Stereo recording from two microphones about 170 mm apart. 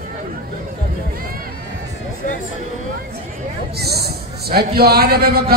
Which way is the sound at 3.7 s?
70° right (ahead or behind).